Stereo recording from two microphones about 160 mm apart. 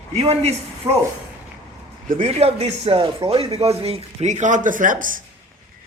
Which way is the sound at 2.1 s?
40° right (ahead or behind).